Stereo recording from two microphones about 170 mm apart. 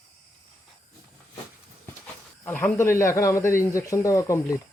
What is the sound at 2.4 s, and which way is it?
Speech, 10° left (ahead or behind).